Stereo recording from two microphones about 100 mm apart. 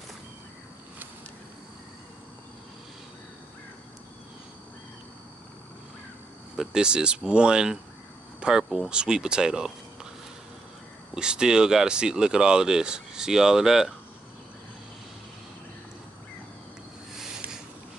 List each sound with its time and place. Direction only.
6.5 s speech: 5° right (ahead or behind)
11.1 s speech: 10° right (ahead or behind)